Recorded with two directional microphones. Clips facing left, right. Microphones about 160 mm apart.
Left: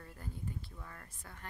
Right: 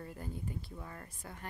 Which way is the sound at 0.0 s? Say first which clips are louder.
Right 4 dB; 15° right (ahead or behind).